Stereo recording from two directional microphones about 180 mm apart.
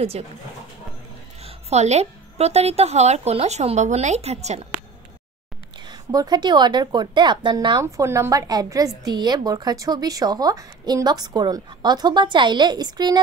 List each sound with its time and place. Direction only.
1.4 s a woman's voice: 35° right (ahead or behind)
5.9 s a woman's voice: 25° right (ahead or behind)